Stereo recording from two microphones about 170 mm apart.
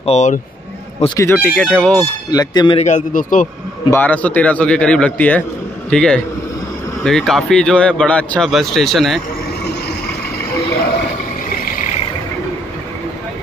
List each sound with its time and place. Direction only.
0.0 s speech: 40° left (ahead or behind)
1.0 s a man's voice: 20° left (ahead or behind)
2.3 s speech: 25° left (ahead or behind)
2.8 s a man's voice: 50° left (ahead or behind)
3.9 s a man's voice: 10° left (ahead or behind)